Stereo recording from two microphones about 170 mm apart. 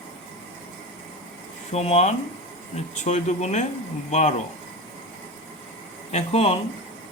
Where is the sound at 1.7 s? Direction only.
40° left (ahead or behind).